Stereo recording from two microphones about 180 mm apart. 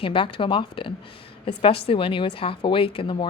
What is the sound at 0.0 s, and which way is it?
A woman's voice, 30° left (ahead or behind).